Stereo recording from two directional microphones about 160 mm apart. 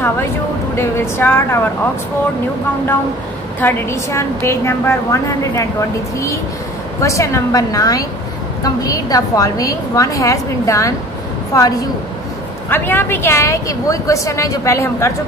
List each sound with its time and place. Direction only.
0.7 s a woman's voice: 15° left (ahead or behind)
3.6 s a woman's voice: 15° left (ahead or behind)